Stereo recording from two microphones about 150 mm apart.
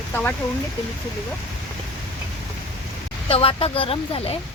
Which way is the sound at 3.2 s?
40° left (ahead or behind).